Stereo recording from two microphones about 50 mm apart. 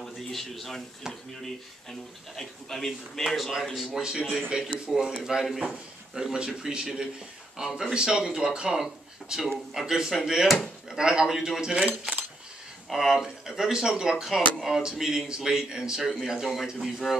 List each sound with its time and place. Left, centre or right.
0.0 s speech: centre
1.0 s speech: centre
1.4 s a man's voice: centre
4.5 s speech: centre
5.2 s a man's voice: centre
12.9 s speech: centre